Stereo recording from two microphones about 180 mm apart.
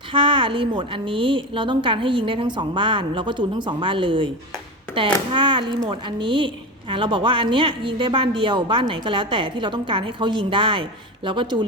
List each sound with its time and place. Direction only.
0.1 s a woman's voice: 30° right (ahead or behind)